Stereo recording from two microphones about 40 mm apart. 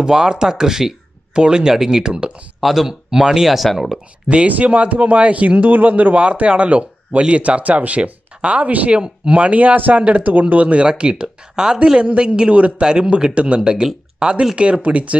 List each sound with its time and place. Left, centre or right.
0.0 s a man's voice: centre
2.6 s speech: centre
4.5 s speech: right
6.2 s a man's voice: right